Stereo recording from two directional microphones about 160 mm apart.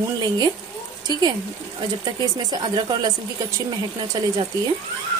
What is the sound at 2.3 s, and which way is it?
Speech, 25° right (ahead or behind).